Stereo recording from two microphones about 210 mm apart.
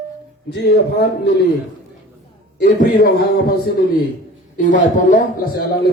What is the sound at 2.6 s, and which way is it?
Speech, 45° left (ahead or behind).